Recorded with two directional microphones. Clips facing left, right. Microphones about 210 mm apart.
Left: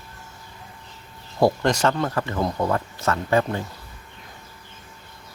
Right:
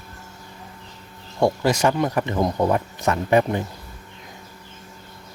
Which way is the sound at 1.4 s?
5° right (ahead or behind).